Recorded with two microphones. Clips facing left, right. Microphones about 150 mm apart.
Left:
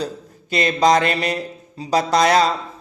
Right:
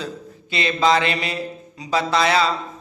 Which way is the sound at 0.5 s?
45° left (ahead or behind).